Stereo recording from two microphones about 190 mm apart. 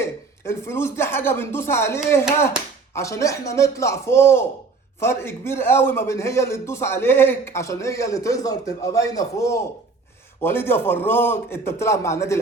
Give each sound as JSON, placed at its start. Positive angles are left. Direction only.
{"t": 0.0, "sound": "a man's voice", "side_deg": 15}